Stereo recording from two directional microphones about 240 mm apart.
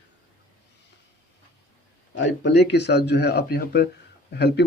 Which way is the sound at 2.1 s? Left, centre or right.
Left.